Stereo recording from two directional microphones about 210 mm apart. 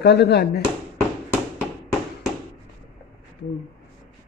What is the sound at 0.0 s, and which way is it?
Speech, 50° left (ahead or behind).